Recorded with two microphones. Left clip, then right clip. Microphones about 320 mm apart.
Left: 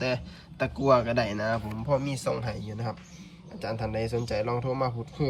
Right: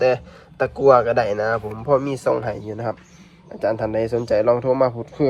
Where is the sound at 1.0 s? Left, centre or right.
Centre.